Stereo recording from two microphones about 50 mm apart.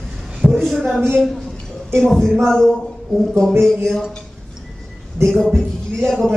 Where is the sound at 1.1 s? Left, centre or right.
Centre.